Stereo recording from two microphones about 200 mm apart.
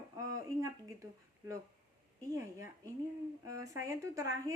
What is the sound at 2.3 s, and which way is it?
Speech, 15° right (ahead or behind).